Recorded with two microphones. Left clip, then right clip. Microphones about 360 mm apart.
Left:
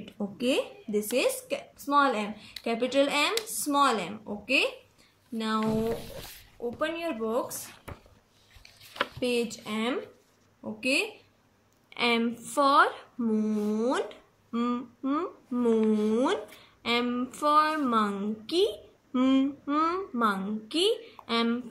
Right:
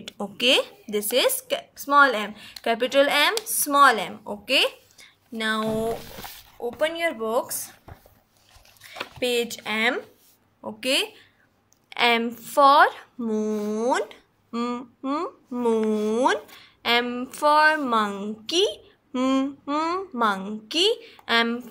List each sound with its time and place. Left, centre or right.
0.0 s a woman's voice: right
6.8 s a woman's voice: centre
9.2 s a woman's voice: right